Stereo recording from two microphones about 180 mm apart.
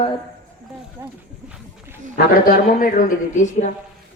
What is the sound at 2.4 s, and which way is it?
Speech, 50° left (ahead or behind).